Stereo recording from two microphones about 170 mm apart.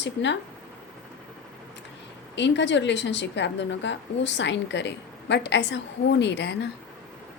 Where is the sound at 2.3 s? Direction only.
90° left.